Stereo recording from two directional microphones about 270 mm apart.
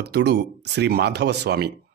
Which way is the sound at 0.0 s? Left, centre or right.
Right.